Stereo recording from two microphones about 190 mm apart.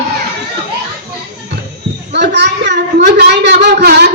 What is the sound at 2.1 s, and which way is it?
A woman's voice, 65° right (ahead or behind).